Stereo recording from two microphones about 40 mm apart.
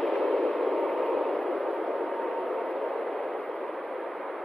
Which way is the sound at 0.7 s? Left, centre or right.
Centre.